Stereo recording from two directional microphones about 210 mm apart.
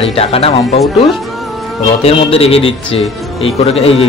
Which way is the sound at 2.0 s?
25° left (ahead or behind).